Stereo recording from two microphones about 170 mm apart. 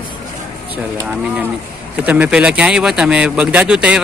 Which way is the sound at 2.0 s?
10° right (ahead or behind).